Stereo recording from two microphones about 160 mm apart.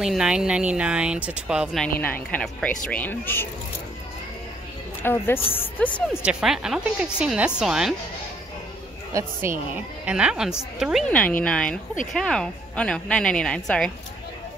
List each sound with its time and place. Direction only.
0.0 s speech: 5° right (ahead or behind)
2.0 s a woman's voice: 10° left (ahead or behind)
5.0 s a woman's voice: 15° left (ahead or behind)
6.2 s speech: 5° right (ahead or behind)
9.4 s a woman's voice: 15° right (ahead or behind); by 13.9 s 5° left (ahead or behind)